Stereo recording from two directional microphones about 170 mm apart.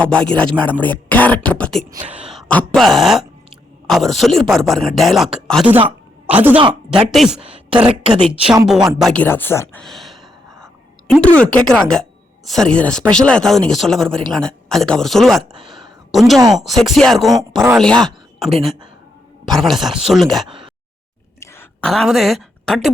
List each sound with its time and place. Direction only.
0.0 s speech: 5° left (ahead or behind)
2.0 s a man's voice: 5° right (ahead or behind)
7.4 s throat clearing: 30° right (ahead or behind)
7.9 s a woman's voice: 30° right (ahead or behind)
8.2 s a man's voice: 5° right (ahead or behind); by 9.8 s 10° left (ahead or behind)
9.8 s a sound: centre (ahead or behind)
11.1 s a man's voice: 5° left (ahead or behind)
19.5 s a man's voice: centre (ahead or behind)
21.4 s a sound: 15° left (ahead or behind)